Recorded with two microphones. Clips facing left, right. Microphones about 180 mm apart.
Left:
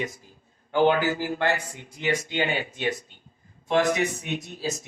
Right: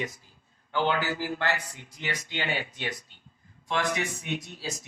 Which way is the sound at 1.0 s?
50° left (ahead or behind).